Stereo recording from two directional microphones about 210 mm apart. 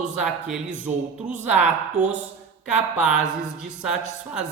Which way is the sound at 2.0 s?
5° right (ahead or behind).